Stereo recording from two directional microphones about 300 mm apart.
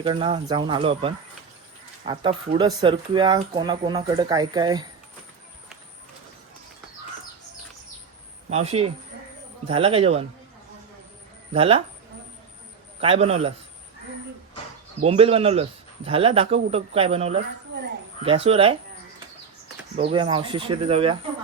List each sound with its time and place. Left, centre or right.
0.0 s speech: centre
8.4 s speech: right
11.5 s speech: centre
13.0 s speech: centre
15.0 s speech: centre
18.4 s speech: centre
20.0 s speech: centre